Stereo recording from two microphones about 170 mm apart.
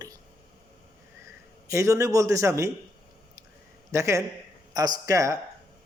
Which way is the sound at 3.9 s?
15° right (ahead or behind).